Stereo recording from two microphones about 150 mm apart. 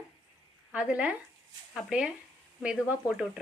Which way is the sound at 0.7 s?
10° right (ahead or behind).